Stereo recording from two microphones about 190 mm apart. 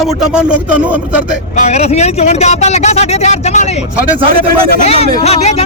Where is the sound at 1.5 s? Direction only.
35° left (ahead or behind).